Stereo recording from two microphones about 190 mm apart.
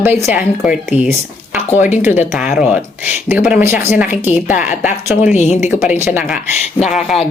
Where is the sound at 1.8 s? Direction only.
40° left (ahead or behind).